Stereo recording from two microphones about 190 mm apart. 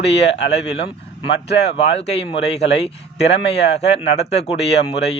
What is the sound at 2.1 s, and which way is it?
Speech, 65° left (ahead or behind).